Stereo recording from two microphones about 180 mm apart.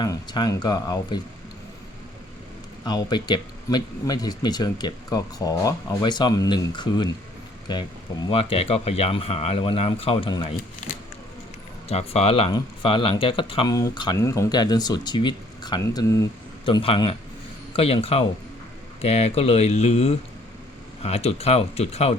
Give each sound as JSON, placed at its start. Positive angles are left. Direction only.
{"t": 0.0, "sound": "speech", "side_deg": 25}
{"t": 2.8, "sound": "speech", "side_deg": 25}
{"t": 11.9, "sound": "speech", "side_deg": 35}
{"t": 16.6, "sound": "speech", "side_deg": 30}